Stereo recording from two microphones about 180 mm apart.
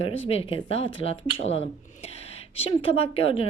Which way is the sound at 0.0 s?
35° left (ahead or behind).